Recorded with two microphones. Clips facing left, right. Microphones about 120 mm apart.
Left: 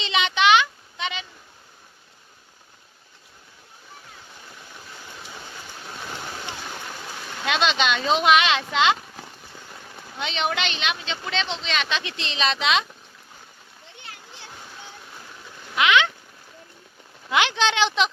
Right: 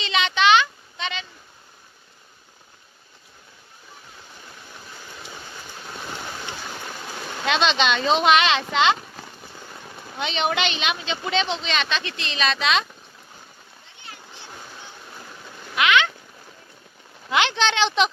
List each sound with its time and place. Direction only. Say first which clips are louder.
0.0 s a sound: even; 15° left (ahead or behind)
7.4 s speech: right 2 dB; 5° left (ahead or behind)
10.2 s speech: right 2 dB; centre (ahead or behind)
11.9 s a woman's voice: right 1 dB; 15° left (ahead or behind)
15.7 s a sound: even; 20° left (ahead or behind)
17.3 s speech: even; 10° left (ahead or behind)